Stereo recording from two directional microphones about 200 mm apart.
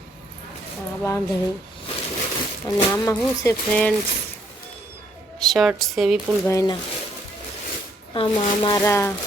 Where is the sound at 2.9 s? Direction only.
15° left (ahead or behind).